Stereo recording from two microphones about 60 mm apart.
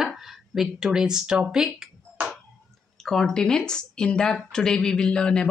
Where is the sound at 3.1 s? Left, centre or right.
Centre.